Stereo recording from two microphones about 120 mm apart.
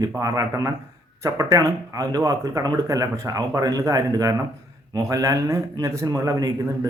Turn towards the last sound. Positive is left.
turn(degrees=-30)  # may be behind; listen again after turning